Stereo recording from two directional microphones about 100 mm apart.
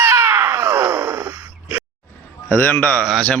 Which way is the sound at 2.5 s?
15° left (ahead or behind).